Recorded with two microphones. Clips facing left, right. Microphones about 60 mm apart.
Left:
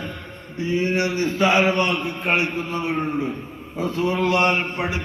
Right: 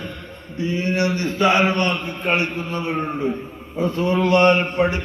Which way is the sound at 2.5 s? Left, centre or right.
Centre.